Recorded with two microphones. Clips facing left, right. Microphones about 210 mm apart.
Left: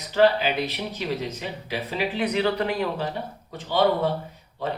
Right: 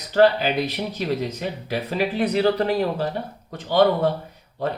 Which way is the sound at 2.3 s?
35° right (ahead or behind).